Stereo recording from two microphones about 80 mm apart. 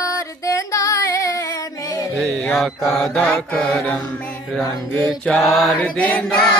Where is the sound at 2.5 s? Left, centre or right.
Centre.